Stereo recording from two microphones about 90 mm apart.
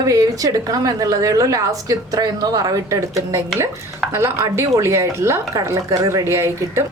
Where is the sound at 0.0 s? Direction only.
40° right (ahead or behind).